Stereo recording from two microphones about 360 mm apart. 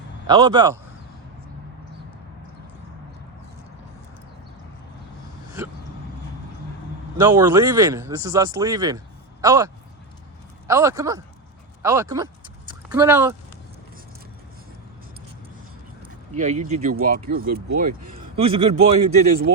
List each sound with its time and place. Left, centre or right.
0.3 s speech: centre
7.2 s speech: centre
10.7 s speech: centre
16.3 s speech: centre
17.4 s speech: right
17.7 s speech: right